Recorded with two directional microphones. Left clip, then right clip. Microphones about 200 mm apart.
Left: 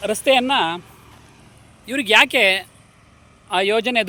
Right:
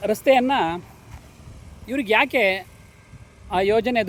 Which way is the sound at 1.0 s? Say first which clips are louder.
Left 1 dB; 60° right (ahead or behind).